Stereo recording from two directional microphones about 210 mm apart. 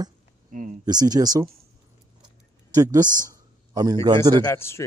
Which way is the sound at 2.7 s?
15° right (ahead or behind).